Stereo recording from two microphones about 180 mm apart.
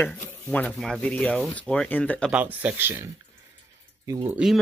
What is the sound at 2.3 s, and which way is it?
Speech, 10° right (ahead or behind).